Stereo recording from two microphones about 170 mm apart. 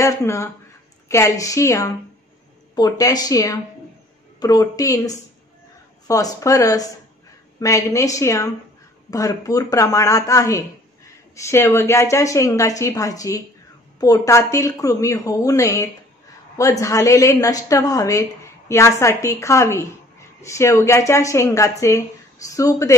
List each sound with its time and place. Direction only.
0.0 s a woman's voice: 20° left (ahead or behind)